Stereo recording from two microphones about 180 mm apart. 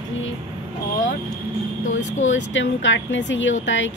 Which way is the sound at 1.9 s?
40° left (ahead or behind).